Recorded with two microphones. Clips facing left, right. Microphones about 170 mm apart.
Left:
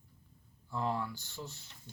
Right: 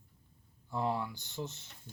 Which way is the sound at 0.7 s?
15° right (ahead or behind).